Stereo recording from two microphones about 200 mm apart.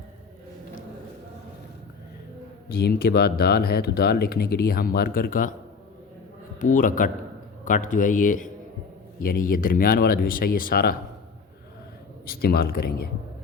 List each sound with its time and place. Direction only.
2.6 s speech: 50° left (ahead or behind)
6.7 s speech: 40° left (ahead or behind)
12.2 s speech: 50° left (ahead or behind)